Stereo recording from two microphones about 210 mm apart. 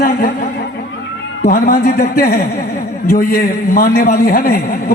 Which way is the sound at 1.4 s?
45° left (ahead or behind).